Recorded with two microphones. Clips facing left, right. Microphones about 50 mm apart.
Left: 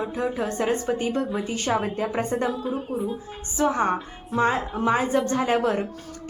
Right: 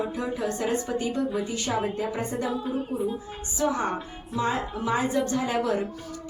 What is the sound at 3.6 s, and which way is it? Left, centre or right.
Speech, left.